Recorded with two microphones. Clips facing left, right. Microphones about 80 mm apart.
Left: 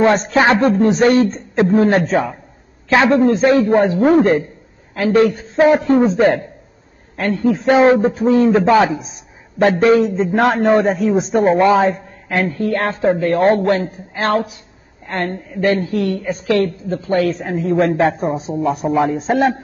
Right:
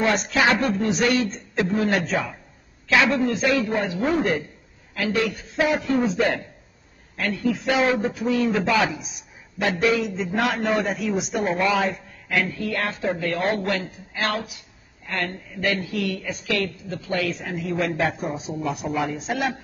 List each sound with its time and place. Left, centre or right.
0.0 s a man's voice: left